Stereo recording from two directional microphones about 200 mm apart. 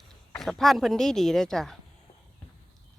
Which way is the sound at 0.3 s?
Centre (ahead or behind).